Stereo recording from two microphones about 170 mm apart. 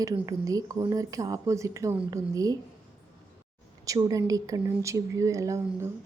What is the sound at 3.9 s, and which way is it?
Speech, 20° right (ahead or behind).